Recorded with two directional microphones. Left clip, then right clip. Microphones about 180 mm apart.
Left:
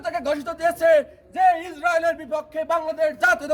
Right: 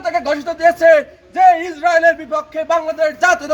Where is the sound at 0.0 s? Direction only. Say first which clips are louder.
Right 7 dB; 20° left (ahead or behind).